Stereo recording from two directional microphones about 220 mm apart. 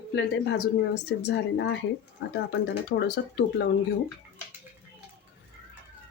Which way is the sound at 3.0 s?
50° left (ahead or behind).